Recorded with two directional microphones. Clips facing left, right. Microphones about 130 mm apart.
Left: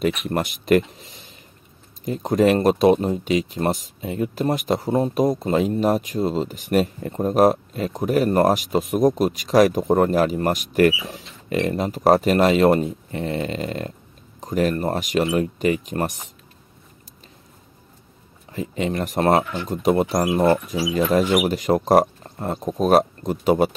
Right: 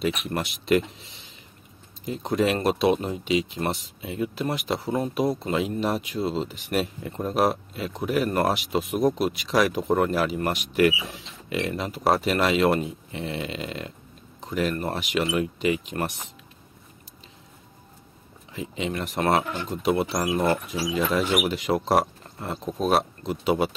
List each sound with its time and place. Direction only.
0.0 s speech: 50° left (ahead or behind)
18.5 s speech: 45° left (ahead or behind)